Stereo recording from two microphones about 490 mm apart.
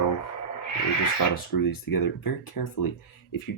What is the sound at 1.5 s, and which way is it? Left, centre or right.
Speech, left.